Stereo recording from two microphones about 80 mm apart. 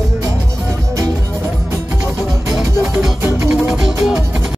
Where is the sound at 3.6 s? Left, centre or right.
Centre.